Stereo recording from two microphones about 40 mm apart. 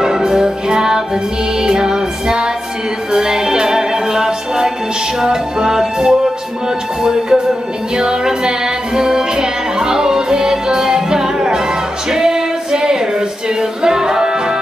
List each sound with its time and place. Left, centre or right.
0.0 s music: centre
12.1 s female singing: centre
13.6 s music: centre